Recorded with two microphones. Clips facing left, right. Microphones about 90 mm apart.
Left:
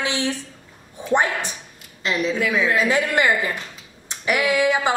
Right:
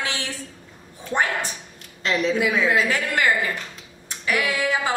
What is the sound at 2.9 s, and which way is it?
A woman's voice, 20° left (ahead or behind).